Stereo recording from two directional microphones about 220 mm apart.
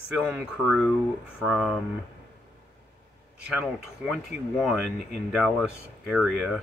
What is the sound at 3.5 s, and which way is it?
Speech, 5° right (ahead or behind).